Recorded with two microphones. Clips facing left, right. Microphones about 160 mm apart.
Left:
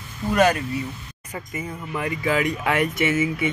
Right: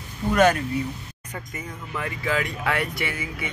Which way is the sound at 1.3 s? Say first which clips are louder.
Left 4 dB; 10° left (ahead or behind).